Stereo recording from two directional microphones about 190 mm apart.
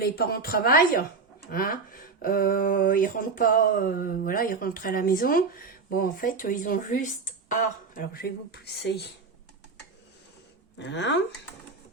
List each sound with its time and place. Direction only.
0.0 s speech: 50° left (ahead or behind)
10.8 s speech: 70° left (ahead or behind)